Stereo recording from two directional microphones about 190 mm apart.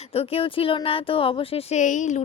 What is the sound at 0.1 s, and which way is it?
Speech, 30° left (ahead or behind).